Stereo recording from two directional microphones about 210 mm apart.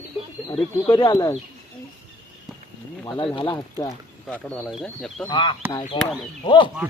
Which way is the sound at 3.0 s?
20° left (ahead or behind).